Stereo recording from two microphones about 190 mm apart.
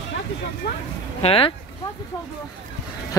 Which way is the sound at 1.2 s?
30° left (ahead or behind).